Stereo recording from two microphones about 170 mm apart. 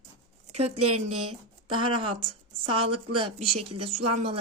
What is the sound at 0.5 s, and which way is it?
Speech, 40° right (ahead or behind).